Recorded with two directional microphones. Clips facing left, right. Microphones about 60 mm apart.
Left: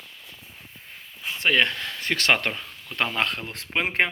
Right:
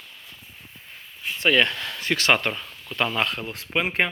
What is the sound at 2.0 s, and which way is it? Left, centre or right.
Speech, left.